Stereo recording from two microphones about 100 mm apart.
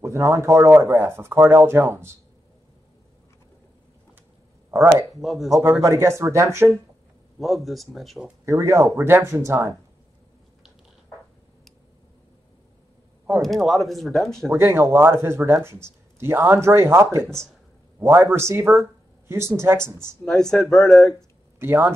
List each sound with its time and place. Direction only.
0.0 s speech: 30° right (ahead or behind)
4.6 s speech: 25° right (ahead or behind)
5.1 s speech: centre (ahead or behind)
5.5 s speech: 30° right (ahead or behind)
7.3 s speech: centre (ahead or behind)
8.5 s speech: 30° right (ahead or behind)
13.4 s speech: centre (ahead or behind)
14.5 s speech: 25° right (ahead or behind)
20.2 s speech: 5° left (ahead or behind)
21.5 s speech: 20° right (ahead or behind)